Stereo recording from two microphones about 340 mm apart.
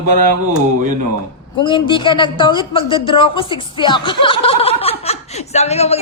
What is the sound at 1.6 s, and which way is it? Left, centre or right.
Speech, centre.